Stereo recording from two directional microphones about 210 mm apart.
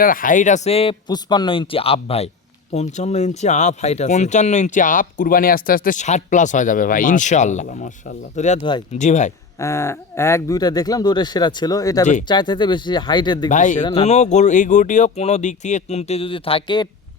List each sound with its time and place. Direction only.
0.0 s speech: 40° left (ahead or behind)
9.6 s speech: 15° left (ahead or behind)
13.5 s speech: 35° left (ahead or behind); by 16.9 s 20° left (ahead or behind)